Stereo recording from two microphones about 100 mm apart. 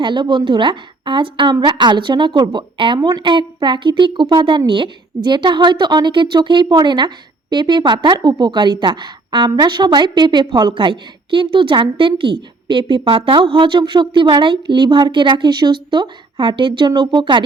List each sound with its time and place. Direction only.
0.0 s a woman's voice: 50° right (ahead or behind)